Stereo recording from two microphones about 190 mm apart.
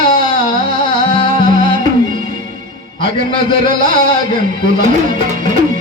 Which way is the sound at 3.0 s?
45° right (ahead or behind).